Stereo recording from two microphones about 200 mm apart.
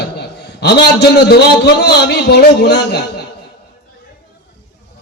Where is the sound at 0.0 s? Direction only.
55° left (ahead or behind).